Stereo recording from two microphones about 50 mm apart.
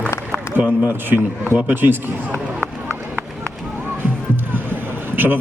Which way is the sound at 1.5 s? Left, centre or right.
Right.